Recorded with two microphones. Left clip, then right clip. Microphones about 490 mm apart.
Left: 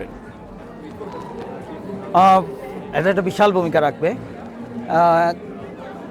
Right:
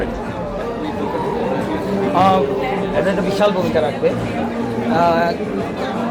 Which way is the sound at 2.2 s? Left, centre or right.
Left.